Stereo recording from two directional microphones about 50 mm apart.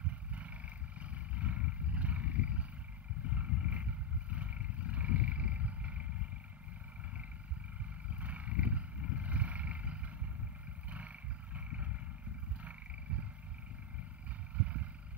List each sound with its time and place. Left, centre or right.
0.3 s wild animals: right
8.1 s vehicle: right
10.9 s roaring cats: right
14.6 s vehicle: right